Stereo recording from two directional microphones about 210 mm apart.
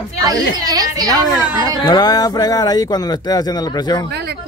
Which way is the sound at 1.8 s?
20° left (ahead or behind).